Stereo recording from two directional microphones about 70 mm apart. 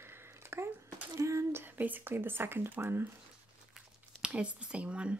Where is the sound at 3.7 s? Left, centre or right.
Centre.